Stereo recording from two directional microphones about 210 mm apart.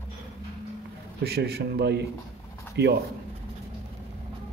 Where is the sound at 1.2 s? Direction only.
50° right (ahead or behind).